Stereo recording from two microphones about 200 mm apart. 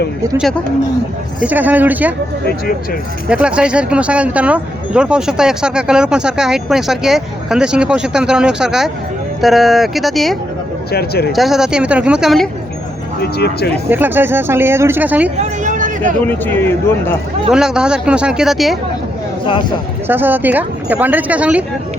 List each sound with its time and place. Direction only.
1.4 s speech: 10° right (ahead or behind)
3.2 s speech: 5° right (ahead or behind)
10.9 s speech: 50° left (ahead or behind)
11.3 s speech: centre (ahead or behind)
13.2 s speech: 55° left (ahead or behind)
13.8 s speech: 10° right (ahead or behind)
15.4 s vehicle: 40° right (ahead or behind)
16.2 s speech: 10° left (ahead or behind)
17.5 s speech: 5° right (ahead or behind)
20.1 s speech: 10° right (ahead or behind)